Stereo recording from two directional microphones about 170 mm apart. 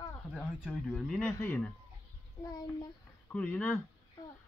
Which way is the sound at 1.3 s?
15° left (ahead or behind).